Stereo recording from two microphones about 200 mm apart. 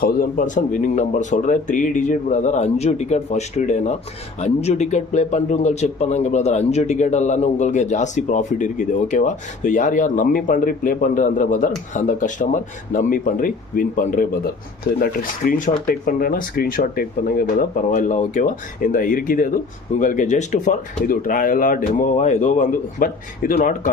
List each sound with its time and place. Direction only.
0.0 s a man's voice: 45° left (ahead or behind)